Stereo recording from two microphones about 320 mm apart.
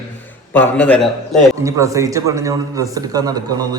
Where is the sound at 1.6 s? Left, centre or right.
Centre.